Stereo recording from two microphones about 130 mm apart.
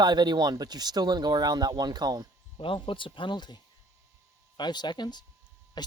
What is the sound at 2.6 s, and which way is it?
Speech, 40° left (ahead or behind).